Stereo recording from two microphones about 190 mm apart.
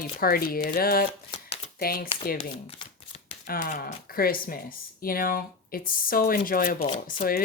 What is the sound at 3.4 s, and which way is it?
Speech, 45° left (ahead or behind).